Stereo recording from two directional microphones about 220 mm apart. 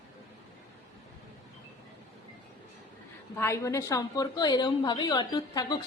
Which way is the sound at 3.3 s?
10° left (ahead or behind).